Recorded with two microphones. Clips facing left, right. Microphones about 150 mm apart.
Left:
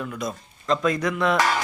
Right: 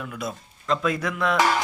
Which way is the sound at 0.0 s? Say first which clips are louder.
Left 2 dB; 5° right (ahead or behind).